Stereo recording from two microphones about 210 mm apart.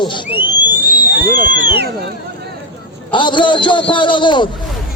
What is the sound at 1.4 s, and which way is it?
Speech, 55° left (ahead or behind).